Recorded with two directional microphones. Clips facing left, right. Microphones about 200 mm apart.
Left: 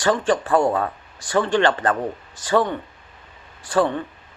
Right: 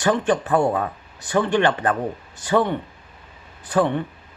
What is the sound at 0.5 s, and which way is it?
Speech, 10° right (ahead or behind).